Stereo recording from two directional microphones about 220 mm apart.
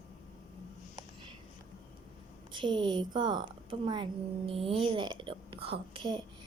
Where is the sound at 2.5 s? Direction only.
20° right (ahead or behind).